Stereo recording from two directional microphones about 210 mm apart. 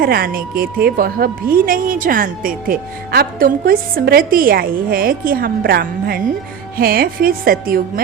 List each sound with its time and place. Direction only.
0.0 s a woman's voice: 45° right (ahead or behind)